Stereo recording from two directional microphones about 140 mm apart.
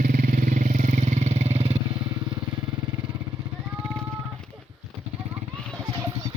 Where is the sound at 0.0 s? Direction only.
90° right; by 1.8 s 45° right (ahead or behind).